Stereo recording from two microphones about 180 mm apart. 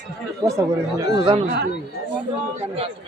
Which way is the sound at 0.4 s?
15° right (ahead or behind).